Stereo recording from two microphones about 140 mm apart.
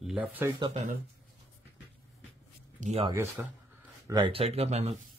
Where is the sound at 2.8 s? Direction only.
50° right (ahead or behind).